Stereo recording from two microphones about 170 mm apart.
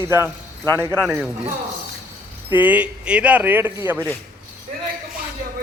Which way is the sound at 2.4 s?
10° right (ahead or behind).